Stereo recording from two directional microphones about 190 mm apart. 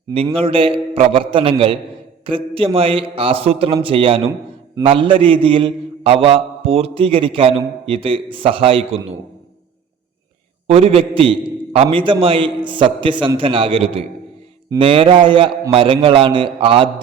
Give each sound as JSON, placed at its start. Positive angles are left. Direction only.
{"t": 0.3, "sound": "a man's voice", "side_deg": -30}
{"t": 10.7, "sound": "a man's voice", "side_deg": -35}